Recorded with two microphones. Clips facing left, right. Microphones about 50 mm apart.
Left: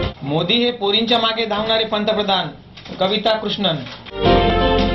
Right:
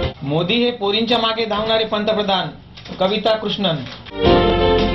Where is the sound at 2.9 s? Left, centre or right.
Centre.